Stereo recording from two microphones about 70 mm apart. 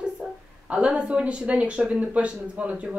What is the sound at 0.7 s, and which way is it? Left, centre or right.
A woman's voice, centre.